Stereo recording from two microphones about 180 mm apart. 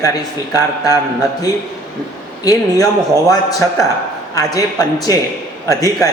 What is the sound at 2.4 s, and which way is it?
A man's voice, 20° left (ahead or behind).